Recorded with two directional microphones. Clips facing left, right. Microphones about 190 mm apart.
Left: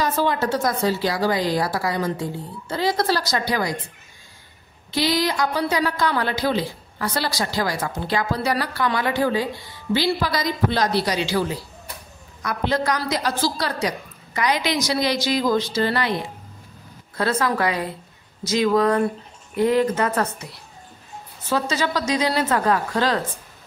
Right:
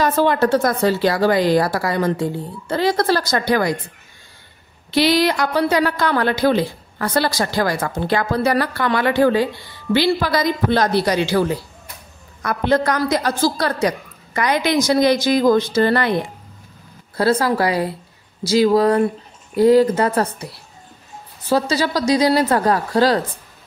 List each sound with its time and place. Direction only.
0.0 s a woman's voice: 60° right (ahead or behind)
4.9 s a woman's voice: 70° right (ahead or behind); by 16.2 s 55° right (ahead or behind)
17.2 s a woman's voice: 30° right (ahead or behind)
21.5 s a woman's voice: 35° right (ahead or behind)